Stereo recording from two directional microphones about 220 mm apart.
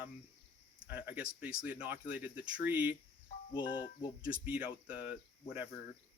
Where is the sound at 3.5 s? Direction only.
20° left (ahead or behind).